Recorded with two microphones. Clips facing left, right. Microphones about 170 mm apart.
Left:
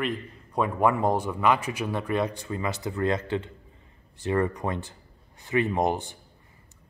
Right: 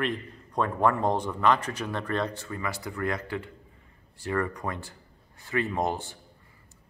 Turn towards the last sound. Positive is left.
turn(degrees=20)  # may be behind; listen again after turning